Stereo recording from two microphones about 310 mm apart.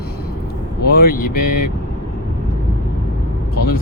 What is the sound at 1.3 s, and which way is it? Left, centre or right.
Speech, left.